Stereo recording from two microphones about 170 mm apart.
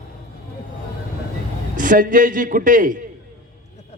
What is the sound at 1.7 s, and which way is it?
A man's voice, 50° right (ahead or behind).